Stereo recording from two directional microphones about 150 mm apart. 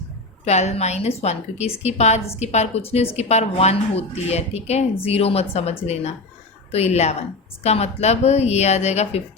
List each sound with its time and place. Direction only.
0.4 s a woman's voice: 45° left (ahead or behind)